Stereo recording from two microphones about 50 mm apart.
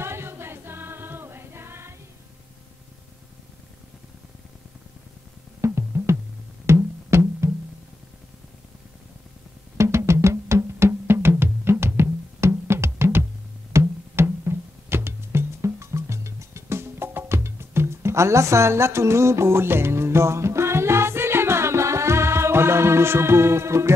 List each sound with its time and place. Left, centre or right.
0.0 s music: right
5.6 s music: right
9.8 s music: right